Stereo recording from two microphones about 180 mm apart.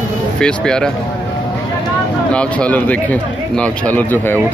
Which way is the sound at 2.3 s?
5° left (ahead or behind).